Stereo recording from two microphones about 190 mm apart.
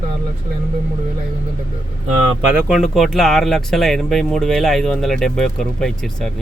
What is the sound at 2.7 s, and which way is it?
Speech, centre (ahead or behind).